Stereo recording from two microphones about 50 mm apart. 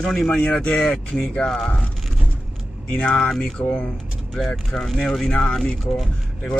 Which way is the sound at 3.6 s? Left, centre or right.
Left.